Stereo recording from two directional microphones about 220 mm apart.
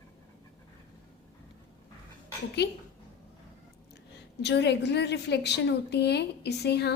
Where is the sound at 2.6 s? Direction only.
50° left (ahead or behind).